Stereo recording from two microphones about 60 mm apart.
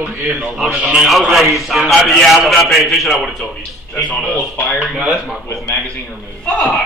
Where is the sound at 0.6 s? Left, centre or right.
Right.